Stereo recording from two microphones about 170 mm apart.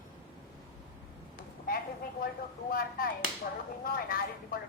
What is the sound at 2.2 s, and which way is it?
A man's voice, 60° left (ahead or behind).